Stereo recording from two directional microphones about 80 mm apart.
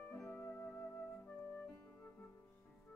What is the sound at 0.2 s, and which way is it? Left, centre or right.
Music, left.